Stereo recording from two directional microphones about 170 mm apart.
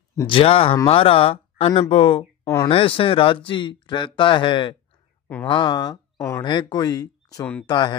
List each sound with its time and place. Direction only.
0.3 s speech: 35° left (ahead or behind)
2.4 s speech: 15° left (ahead or behind)
2.7 s speech: 30° left (ahead or behind)